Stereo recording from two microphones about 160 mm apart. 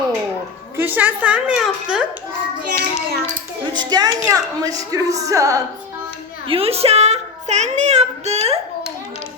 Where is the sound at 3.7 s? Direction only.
25° right (ahead or behind).